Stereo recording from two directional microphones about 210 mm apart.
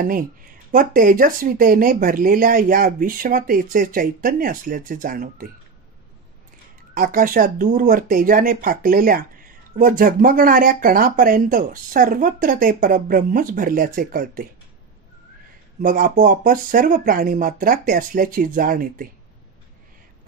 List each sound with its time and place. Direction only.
0.0 s speech: 40° right (ahead or behind)
6.9 s speech: 40° right (ahead or behind)
15.8 s speech: 40° right (ahead or behind)